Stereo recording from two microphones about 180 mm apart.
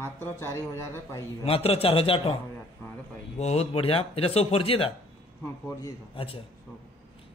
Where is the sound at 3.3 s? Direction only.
35° left (ahead or behind).